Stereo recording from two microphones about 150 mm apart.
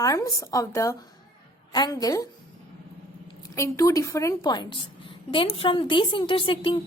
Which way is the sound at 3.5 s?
20° left (ahead or behind).